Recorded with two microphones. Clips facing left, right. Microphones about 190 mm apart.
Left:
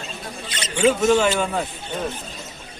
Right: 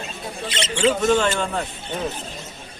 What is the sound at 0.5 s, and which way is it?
Speech, 25° right (ahead or behind).